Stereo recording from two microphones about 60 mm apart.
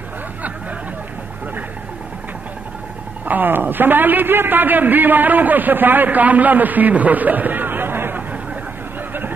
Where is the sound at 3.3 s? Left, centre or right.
Right.